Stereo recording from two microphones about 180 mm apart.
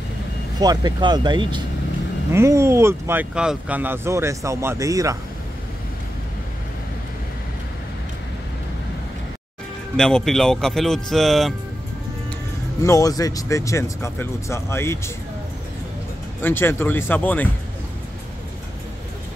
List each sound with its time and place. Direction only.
0.6 s speech: 20° right (ahead or behind)
9.9 s speech: 5° left (ahead or behind)
12.8 s speech: 20° left (ahead or behind)
16.3 s speech: 10° left (ahead or behind)